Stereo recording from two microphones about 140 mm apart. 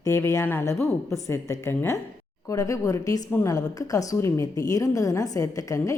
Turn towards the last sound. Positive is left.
turn(degrees=25)  # may be behind; listen again after turning